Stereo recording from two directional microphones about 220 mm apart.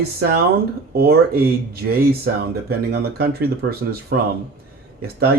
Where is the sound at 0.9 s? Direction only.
45° right (ahead or behind).